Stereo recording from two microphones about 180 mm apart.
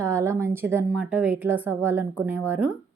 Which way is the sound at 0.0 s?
15° right (ahead or behind).